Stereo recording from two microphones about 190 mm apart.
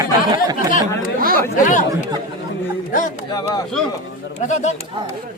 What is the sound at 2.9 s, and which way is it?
Speech, 40° left (ahead or behind).